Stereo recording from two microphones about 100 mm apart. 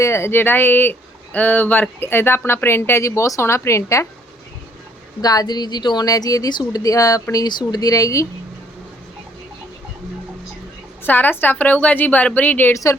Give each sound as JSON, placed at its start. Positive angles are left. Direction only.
{"t": 0.0, "sound": "speech", "side_deg": 25}
{"t": 5.2, "sound": "a woman's voice", "side_deg": 40}
{"t": 11.0, "sound": "a woman's voice", "side_deg": 20}
{"t": 12.7, "sound": "a woman's voice", "side_deg": 30}